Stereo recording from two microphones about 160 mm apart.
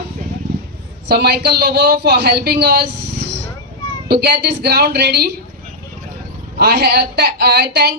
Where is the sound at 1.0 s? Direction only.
90° right.